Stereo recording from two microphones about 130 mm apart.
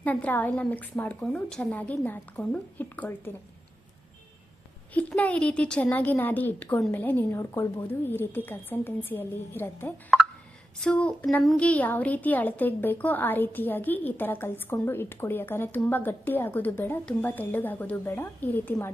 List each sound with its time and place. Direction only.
0.0 s a woman's voice: 10° left (ahead or behind)
4.9 s a woman's voice: 10° left (ahead or behind)